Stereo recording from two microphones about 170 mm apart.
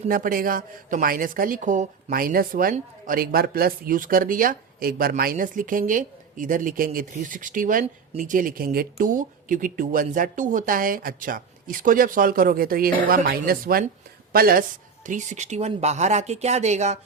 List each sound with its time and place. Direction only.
0.1 s a woman's voice: 55° right (ahead or behind)
15.0 s speech: 45° right (ahead or behind)